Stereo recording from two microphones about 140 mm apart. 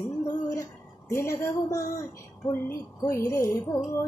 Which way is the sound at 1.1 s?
20° left (ahead or behind).